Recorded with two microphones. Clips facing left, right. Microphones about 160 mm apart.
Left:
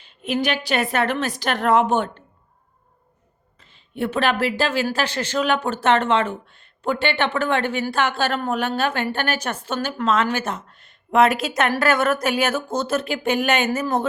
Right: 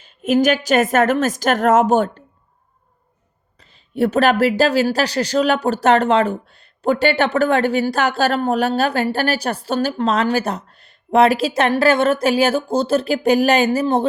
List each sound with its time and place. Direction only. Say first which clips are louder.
0.0 s a woman's voice: right 8 dB; 45° right (ahead or behind)
3.6 s speech: right 7 dB; 40° right (ahead or behind)